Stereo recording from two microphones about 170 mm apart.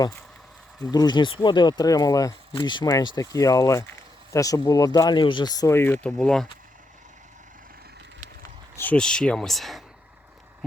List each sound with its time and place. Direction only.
0.9 s speech: 25° left (ahead or behind); by 6.5 s 5° left (ahead or behind)
8.7 s speech: 10° left (ahead or behind)